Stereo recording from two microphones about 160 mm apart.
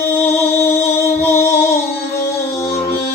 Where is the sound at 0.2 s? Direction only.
15° left (ahead or behind).